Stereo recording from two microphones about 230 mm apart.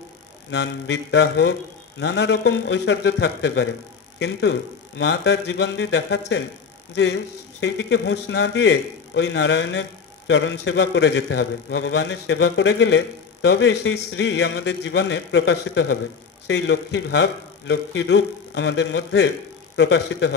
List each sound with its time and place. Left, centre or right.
0.5 s a man's voice: left